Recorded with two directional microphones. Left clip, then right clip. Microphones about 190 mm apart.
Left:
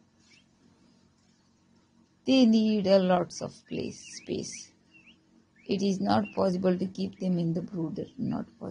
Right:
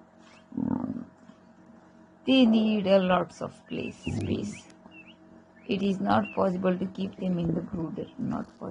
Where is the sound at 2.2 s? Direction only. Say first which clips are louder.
Right 1 dB; 25° left (ahead or behind).